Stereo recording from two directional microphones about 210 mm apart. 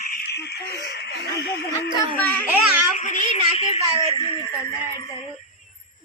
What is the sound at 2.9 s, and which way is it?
A child's voice, 35° left (ahead or behind).